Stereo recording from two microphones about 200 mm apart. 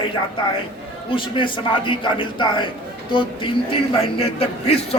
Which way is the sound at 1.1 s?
25° left (ahead or behind).